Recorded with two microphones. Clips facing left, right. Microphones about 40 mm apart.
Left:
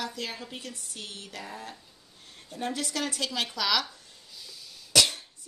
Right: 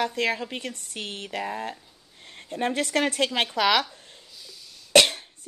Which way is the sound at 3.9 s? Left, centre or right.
Right.